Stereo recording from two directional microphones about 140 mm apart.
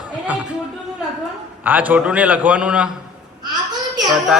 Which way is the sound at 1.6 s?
10° right (ahead or behind).